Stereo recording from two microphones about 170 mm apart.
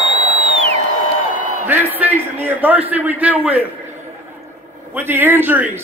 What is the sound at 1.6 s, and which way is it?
A man's voice, 10° right (ahead or behind).